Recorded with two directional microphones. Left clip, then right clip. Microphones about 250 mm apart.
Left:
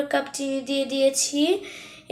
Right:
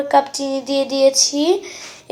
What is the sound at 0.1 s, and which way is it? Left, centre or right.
Speech, centre.